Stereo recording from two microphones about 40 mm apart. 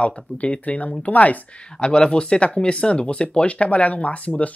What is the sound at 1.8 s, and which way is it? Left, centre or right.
Speech, left.